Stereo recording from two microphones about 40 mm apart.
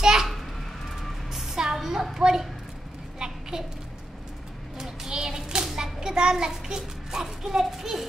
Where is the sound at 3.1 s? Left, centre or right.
Centre.